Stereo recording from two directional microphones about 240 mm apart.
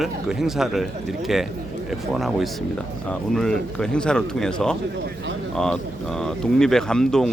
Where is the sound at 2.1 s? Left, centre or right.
Centre.